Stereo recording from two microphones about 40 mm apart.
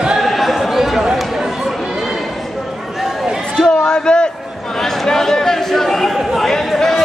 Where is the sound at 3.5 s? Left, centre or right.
Left.